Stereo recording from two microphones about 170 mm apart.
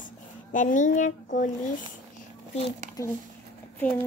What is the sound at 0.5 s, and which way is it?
A child's voice, 50° left (ahead or behind).